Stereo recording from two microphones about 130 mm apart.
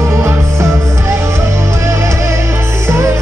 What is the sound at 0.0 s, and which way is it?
Music, 20° right (ahead or behind).